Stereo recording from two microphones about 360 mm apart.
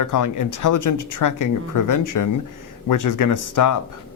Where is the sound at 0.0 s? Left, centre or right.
Left.